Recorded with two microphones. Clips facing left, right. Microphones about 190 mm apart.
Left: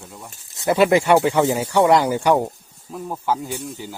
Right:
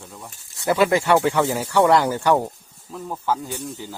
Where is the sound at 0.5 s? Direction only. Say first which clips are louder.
Left 3 dB; 25° left (ahead or behind).